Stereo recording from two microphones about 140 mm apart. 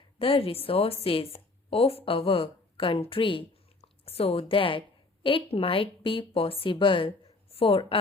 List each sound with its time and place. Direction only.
0.2 s a woman's voice: 40° left (ahead or behind)